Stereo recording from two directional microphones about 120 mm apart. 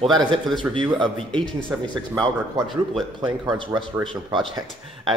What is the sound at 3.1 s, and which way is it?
Speech, 40° right (ahead or behind).